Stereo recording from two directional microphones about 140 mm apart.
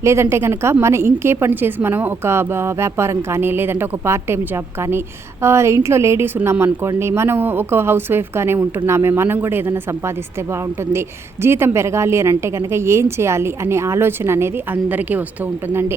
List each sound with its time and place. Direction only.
0.0 s a woman's voice: 20° right (ahead or behind)
5.4 s a woman's voice: 20° right (ahead or behind)
11.4 s speech: 20° right (ahead or behind)